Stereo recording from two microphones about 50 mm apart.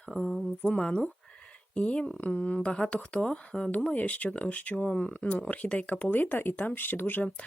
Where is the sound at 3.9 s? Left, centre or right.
Left.